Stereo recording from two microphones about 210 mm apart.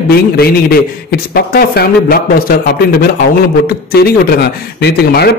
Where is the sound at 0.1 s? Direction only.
45° left (ahead or behind).